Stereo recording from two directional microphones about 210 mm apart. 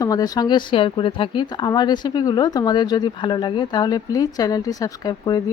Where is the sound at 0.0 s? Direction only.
15° left (ahead or behind).